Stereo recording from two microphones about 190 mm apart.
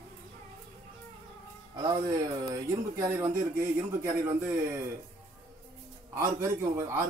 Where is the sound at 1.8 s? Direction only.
25° right (ahead or behind).